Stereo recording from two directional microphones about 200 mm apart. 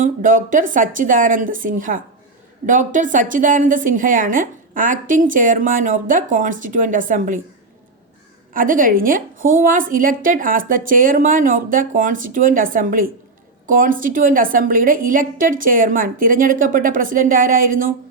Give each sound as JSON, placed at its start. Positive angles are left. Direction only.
{"t": 0.0, "sound": "a woman's voice", "side_deg": -40}
{"t": 8.5, "sound": "a woman's voice", "side_deg": -45}